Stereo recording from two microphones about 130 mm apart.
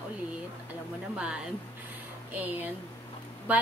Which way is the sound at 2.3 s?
15° right (ahead or behind).